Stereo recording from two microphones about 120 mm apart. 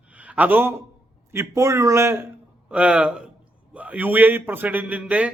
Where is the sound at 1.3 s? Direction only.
25° right (ahead or behind).